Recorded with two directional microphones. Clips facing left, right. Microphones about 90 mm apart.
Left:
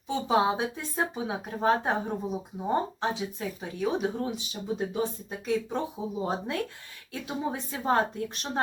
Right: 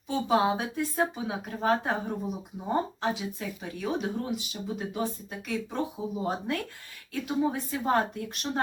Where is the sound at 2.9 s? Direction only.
25° left (ahead or behind).